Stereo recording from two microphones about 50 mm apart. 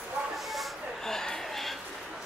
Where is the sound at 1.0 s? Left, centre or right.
Centre.